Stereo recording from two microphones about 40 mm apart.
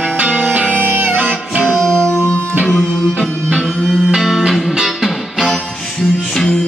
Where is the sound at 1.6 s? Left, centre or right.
Centre.